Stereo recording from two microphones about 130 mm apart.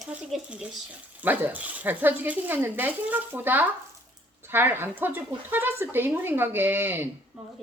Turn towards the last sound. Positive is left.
turn(degrees=-15)  # may be behind; listen again after turning